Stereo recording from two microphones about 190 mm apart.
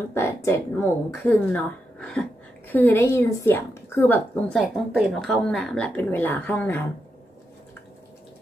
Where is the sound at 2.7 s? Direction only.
10° left (ahead or behind).